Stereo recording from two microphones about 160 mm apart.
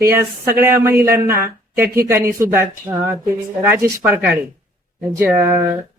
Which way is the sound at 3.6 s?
10° right (ahead or behind).